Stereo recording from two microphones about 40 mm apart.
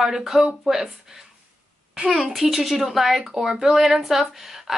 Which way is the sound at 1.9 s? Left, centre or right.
Right.